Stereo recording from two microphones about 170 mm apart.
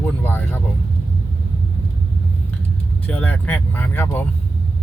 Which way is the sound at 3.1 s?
10° left (ahead or behind).